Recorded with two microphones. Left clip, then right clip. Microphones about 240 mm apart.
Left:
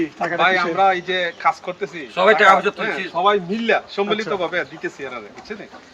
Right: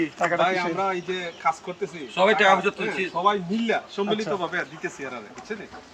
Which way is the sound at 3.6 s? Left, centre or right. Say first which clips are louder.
Left 5 dB; centre.